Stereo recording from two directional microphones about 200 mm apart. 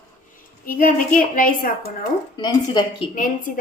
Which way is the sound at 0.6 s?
45° left (ahead or behind).